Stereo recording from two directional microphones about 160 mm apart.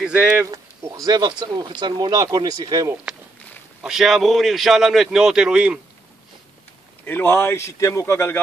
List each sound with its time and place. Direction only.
0.0 s a man's voice: 5° right (ahead or behind)
0.4 s speech: 20° right (ahead or behind)
3.8 s a man's voice: centre (ahead or behind)
7.1 s a man's voice: 15° left (ahead or behind)